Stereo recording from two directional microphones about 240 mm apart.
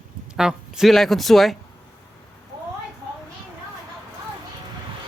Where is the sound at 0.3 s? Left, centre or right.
Centre.